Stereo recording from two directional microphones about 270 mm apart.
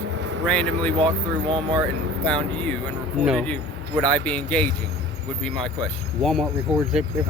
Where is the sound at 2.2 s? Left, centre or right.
Centre.